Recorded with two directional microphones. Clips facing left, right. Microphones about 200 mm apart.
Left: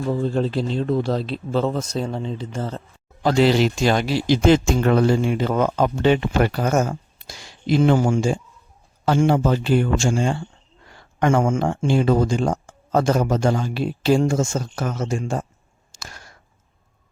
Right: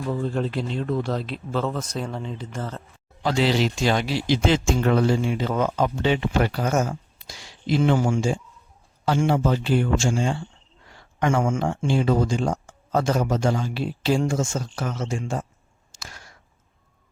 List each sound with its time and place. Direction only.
0.1 s a man's voice: 30° left (ahead or behind)
3.2 s speech: 50° left (ahead or behind)
16.0 s a sound: 45° left (ahead or behind)